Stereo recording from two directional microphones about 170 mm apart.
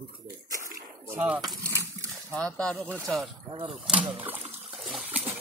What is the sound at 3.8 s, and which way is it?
Speech, 5° right (ahead or behind).